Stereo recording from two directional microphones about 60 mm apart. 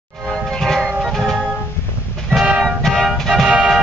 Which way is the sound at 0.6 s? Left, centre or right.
Centre.